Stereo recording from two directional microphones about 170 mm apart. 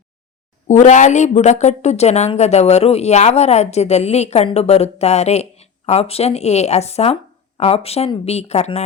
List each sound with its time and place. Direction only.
0.7 s speech: 45° left (ahead or behind)